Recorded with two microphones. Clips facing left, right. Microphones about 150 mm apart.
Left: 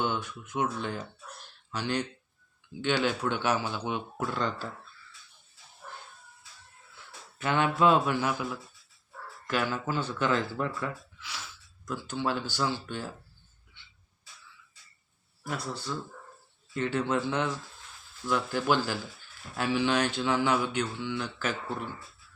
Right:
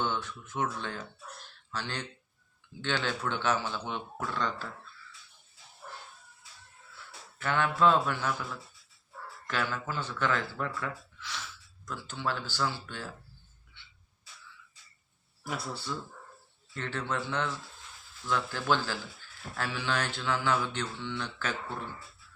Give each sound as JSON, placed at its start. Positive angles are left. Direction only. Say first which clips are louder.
{"t": 0.0, "sound": "speech", "louder": "left 2 dB", "side_deg": 15}
{"t": 7.3, "sound": "speech", "louder": "left 2 dB", "side_deg": 20}
{"t": 9.5, "sound": "speech", "louder": "left 4 dB", "side_deg": 15}
{"t": 15.4, "sound": "speech", "louder": "left 2 dB", "side_deg": -5}
{"t": 16.7, "sound": "speech", "louder": "left 6 dB", "side_deg": 15}